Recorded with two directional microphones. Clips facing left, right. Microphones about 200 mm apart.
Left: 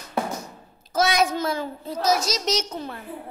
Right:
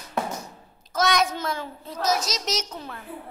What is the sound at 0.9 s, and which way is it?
A child's voice, 5° left (ahead or behind).